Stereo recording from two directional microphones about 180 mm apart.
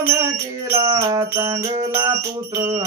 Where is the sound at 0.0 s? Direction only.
15° right (ahead or behind).